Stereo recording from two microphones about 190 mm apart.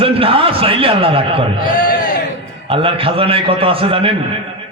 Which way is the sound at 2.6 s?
30° right (ahead or behind).